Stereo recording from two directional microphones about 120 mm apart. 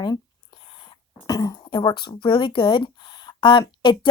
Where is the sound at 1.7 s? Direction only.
40° left (ahead or behind).